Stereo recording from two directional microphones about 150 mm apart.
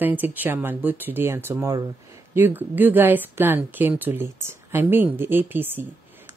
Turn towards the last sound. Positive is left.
turn(degrees=-15)  # may be behind; listen again after turning